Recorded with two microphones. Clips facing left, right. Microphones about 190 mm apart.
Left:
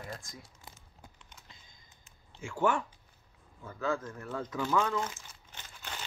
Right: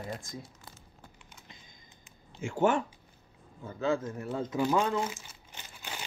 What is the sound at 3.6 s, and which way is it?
Speech, 25° right (ahead or behind).